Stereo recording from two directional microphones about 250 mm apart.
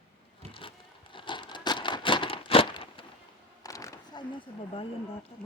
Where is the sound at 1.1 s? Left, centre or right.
Centre.